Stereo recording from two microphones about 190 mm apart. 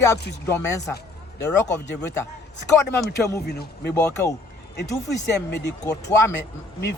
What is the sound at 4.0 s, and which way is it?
Speech, 15° left (ahead or behind).